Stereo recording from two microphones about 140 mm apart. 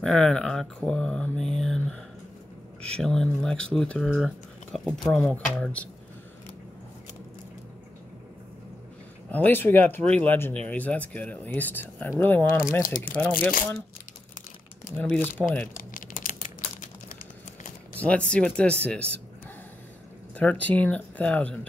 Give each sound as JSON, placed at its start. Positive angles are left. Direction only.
{"t": 0.0, "sound": "speech", "side_deg": 5}
{"t": 5.1, "sound": "speech", "side_deg": 10}
{"t": 9.3, "sound": "speech", "side_deg": 15}
{"t": 15.0, "sound": "speech", "side_deg": 10}
{"t": 15.8, "sound": "crumpling", "side_deg": 75}
{"t": 17.9, "sound": "speech", "side_deg": 10}
{"t": 20.3, "sound": "speech", "side_deg": 10}